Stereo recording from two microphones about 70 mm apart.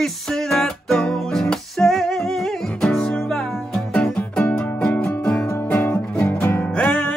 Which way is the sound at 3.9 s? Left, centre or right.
Centre.